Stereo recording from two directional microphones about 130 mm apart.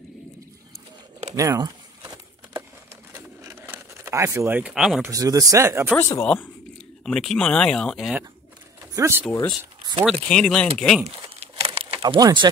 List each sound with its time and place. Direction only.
1.3 s crumpling: 25° right (ahead or behind)
3.2 s bird: 20° right (ahead or behind)
4.6 s speech: 5° right (ahead or behind)
5.0 s speech: 25° right (ahead or behind)
5.9 s speech: 20° left (ahead or behind)
6.2 s speech: 10° left (ahead or behind)
8.9 s speech: 20° right (ahead or behind)
10.0 s speech: 5° left (ahead or behind)
11.1 s crumpling: 50° right (ahead or behind)
12.0 s speech: 30° right (ahead or behind)